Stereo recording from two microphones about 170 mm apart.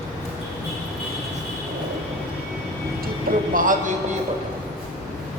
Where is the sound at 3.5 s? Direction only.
50° right (ahead or behind).